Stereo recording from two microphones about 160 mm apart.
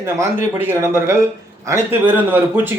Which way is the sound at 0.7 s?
15° right (ahead or behind).